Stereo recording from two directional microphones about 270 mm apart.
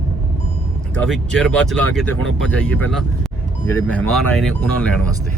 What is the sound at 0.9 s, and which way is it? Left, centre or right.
Speech, centre.